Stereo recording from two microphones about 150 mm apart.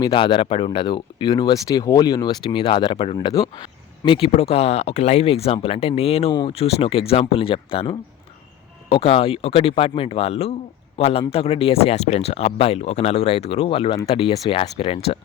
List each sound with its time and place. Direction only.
0.0 s speech: 30° left (ahead or behind)